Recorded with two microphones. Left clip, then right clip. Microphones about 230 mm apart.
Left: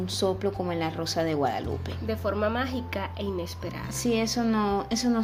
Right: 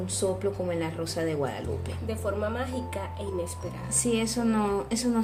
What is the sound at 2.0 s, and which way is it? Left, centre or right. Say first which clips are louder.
Speech: left 3 dB; left.